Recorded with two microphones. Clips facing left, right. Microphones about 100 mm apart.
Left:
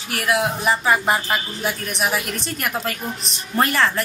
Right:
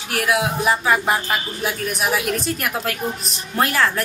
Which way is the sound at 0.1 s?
Centre (ahead or behind).